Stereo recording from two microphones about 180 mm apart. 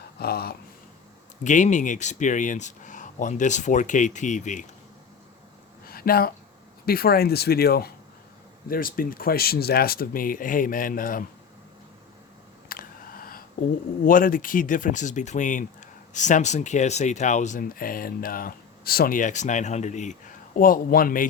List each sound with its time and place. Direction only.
0.2 s speech: 60° left (ahead or behind)
1.5 s speech: 45° left (ahead or behind)
5.9 s speech: 55° left (ahead or behind)
12.6 s a sound: 55° left (ahead or behind)
14.0 s speech: 50° left (ahead or behind)